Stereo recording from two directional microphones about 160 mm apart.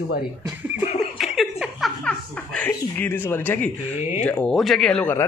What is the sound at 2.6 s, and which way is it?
Speech, 10° left (ahead or behind).